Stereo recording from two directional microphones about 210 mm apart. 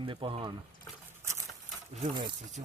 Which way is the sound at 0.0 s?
25° right (ahead or behind).